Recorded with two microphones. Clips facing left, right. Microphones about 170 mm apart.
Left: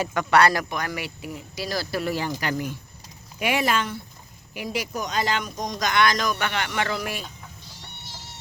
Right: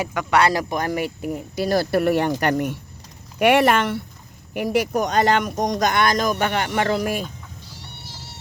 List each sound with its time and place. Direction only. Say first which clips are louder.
0.0 s speech: even; 10° right (ahead or behind)
0.7 s speech: right 7 dB; 45° right (ahead or behind); by 5.9 s 70° right (ahead or behind)
5.9 s speech: right 2 dB; 50° right (ahead or behind)